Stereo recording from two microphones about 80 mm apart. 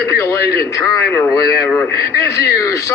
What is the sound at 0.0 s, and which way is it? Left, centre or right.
Speech, left.